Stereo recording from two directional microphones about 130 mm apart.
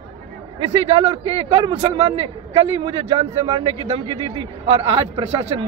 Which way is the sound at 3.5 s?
35° right (ahead or behind).